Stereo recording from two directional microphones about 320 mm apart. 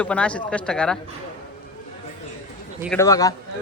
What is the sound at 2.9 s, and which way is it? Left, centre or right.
Speech, centre.